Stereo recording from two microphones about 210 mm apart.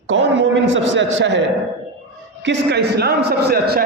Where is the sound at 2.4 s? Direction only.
55° right (ahead or behind).